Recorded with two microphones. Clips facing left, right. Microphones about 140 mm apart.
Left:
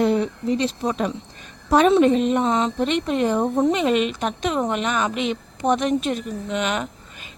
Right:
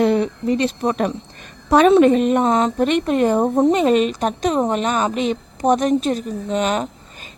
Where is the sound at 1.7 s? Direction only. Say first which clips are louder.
Right 3 dB; 70° right (ahead or behind).